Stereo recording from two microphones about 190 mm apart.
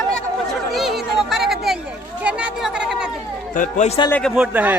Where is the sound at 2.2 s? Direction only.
5° right (ahead or behind).